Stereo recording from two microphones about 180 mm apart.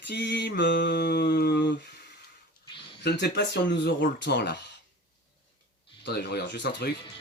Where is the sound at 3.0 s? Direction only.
75° left (ahead or behind).